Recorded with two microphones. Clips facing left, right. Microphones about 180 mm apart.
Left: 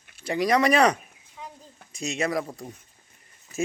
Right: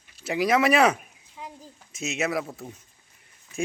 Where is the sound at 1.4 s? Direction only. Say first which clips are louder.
Right 1 dB; 5° right (ahead or behind).